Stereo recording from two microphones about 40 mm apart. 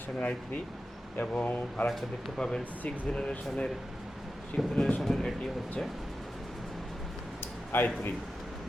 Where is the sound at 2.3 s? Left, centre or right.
Centre.